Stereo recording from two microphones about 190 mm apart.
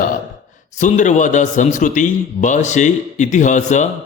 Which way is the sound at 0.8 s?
40° left (ahead or behind).